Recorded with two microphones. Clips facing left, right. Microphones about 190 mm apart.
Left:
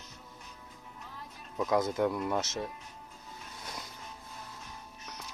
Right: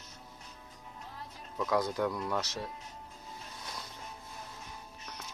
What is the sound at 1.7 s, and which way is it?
Speech, 20° left (ahead or behind).